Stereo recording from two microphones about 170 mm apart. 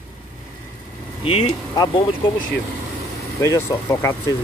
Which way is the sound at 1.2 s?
30° left (ahead or behind).